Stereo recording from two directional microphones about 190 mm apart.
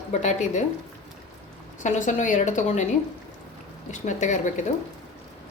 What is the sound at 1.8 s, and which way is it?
A woman's voice, 40° left (ahead or behind).